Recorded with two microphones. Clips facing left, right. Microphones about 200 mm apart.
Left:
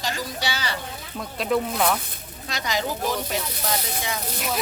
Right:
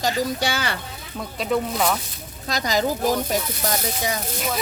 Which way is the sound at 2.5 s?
40° right (ahead or behind).